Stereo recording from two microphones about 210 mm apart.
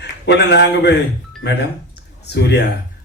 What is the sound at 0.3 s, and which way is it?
Speech, 55° left (ahead or behind).